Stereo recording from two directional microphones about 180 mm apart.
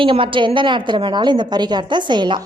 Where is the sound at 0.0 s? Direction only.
30° right (ahead or behind).